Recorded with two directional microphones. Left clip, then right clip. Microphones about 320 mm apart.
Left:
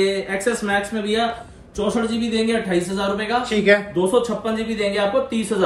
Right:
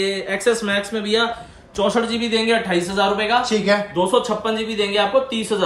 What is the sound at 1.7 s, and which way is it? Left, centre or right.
Speech, centre.